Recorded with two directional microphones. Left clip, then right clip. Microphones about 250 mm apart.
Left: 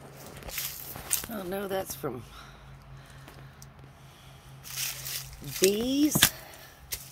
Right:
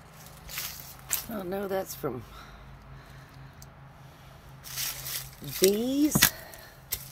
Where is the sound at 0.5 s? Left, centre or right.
Centre.